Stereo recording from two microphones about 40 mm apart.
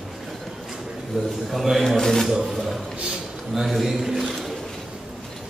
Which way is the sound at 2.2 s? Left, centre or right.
Centre.